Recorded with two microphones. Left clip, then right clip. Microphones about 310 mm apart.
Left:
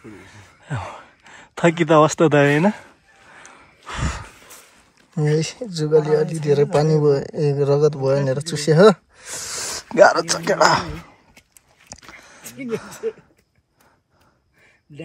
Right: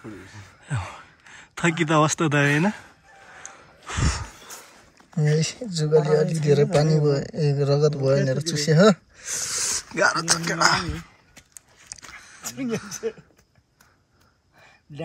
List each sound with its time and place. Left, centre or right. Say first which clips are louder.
0.0 s speech: even; centre
3.3 s gasp: left 1 dB; centre
5.8 s a man's voice: left 3 dB; centre
8.2 s speech: left 2 dB; centre
8.5 s speech: left 5 dB; centre
11.9 s a sound: left 1 dB; centre